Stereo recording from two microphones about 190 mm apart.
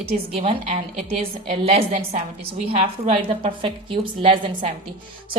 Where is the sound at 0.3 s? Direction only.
35° right (ahead or behind).